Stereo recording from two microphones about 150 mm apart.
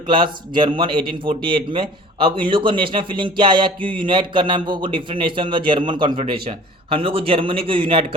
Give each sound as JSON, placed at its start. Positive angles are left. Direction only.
{"t": 0.1, "sound": "a man's voice", "side_deg": -30}